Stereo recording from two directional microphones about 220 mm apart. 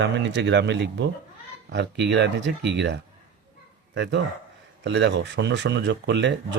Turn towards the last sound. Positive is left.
turn(degrees=-55)  # may be behind; listen again after turning